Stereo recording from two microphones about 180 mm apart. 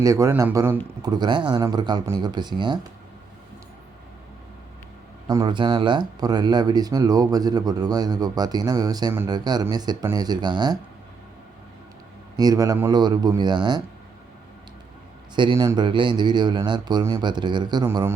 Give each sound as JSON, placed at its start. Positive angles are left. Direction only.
{"t": 0.0, "sound": "speech", "side_deg": -15}
{"t": 5.3, "sound": "speech", "side_deg": -25}
{"t": 12.4, "sound": "speech", "side_deg": -20}
{"t": 15.4, "sound": "speech", "side_deg": -20}